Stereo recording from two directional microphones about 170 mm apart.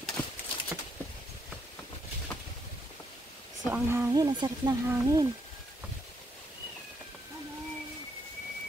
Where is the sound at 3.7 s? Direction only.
15° right (ahead or behind).